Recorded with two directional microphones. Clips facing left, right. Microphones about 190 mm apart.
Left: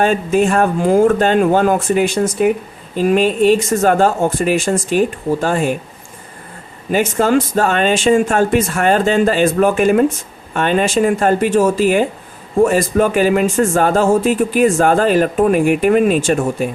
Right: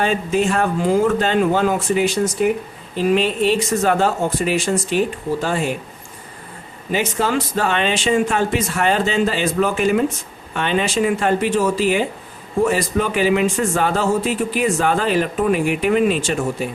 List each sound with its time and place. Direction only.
0.0 s speech: 50° left (ahead or behind)
6.9 s speech: 50° left (ahead or behind)